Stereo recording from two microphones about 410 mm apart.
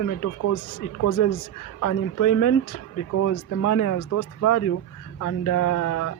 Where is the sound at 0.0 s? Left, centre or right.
Left.